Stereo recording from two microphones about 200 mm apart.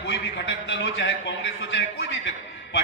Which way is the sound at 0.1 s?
65° left (ahead or behind).